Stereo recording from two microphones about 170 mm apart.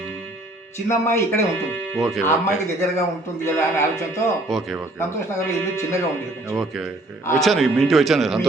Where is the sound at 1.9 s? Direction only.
Centre (ahead or behind).